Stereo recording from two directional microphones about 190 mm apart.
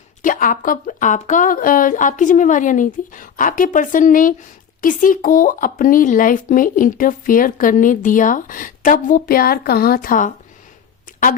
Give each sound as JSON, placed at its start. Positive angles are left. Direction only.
{"t": 0.2, "sound": "speech", "side_deg": 45}